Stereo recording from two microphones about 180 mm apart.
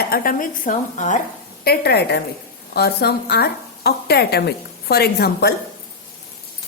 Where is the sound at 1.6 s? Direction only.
60° left (ahead or behind).